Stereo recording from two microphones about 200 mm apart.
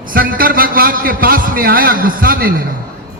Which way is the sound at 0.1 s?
45° right (ahead or behind).